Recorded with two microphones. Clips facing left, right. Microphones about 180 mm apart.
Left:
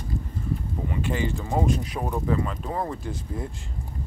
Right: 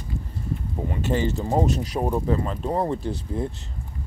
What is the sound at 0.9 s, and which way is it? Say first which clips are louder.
Speech: right 3 dB; 40° right (ahead or behind).